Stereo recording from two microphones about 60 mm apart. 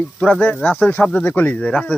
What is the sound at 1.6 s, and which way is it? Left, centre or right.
Speech, centre.